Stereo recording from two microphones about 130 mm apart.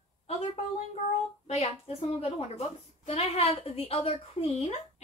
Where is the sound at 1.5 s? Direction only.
50° left (ahead or behind).